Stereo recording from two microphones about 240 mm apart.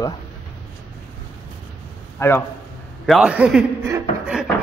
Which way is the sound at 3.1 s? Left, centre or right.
Centre.